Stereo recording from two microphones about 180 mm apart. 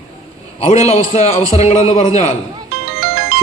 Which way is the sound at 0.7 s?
35° left (ahead or behind).